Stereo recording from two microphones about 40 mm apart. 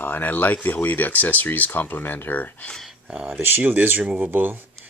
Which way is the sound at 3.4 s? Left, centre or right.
Right.